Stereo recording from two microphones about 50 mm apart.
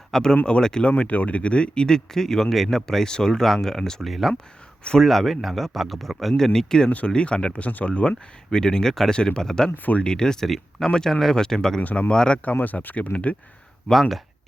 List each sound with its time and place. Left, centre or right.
0.1 s speech: centre
4.0 s speech: centre; by 8.1 s left
8.4 s speech: centre
10.5 s speech: centre
11.8 s speech: left
12.1 s speech: centre
12.5 s speech: left
13.9 s speech: centre